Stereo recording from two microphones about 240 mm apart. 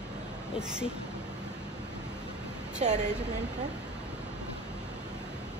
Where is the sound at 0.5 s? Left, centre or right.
Centre.